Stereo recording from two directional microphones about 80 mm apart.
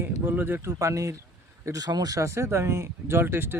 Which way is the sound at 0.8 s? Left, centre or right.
Right.